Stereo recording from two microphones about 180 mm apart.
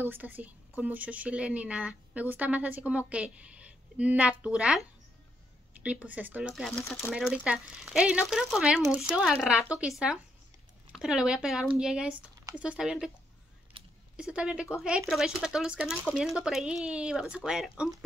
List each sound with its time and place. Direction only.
0.0 s speech: 10° right (ahead or behind)
5.9 s speech: 5° right (ahead or behind)
13.7 s a sound: 30° right (ahead or behind)
14.1 s speech: 5° right (ahead or behind)